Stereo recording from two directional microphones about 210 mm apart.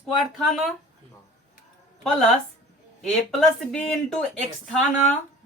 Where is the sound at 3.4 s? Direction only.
5° left (ahead or behind).